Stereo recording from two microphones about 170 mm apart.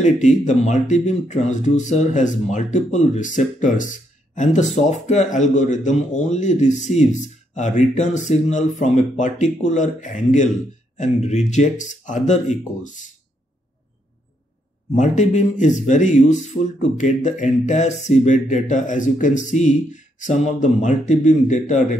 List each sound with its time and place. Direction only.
0.0 s speech: 45° left (ahead or behind)
15.0 s speech: 45° left (ahead or behind)